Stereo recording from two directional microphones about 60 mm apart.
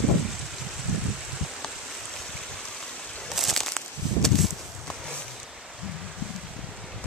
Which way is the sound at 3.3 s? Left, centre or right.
Centre.